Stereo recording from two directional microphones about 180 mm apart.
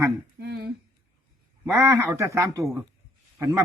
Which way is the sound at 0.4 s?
60° right (ahead or behind).